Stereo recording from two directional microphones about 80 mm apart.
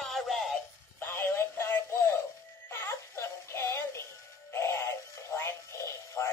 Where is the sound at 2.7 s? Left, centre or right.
Left.